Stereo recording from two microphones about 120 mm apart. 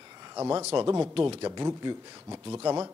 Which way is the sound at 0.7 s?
30° right (ahead or behind).